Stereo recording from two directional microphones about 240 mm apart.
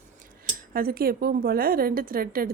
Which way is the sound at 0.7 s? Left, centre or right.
Right.